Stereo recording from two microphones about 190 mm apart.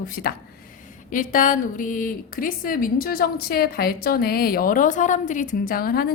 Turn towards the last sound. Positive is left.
turn(degrees=50)  # may be behind; listen again after turning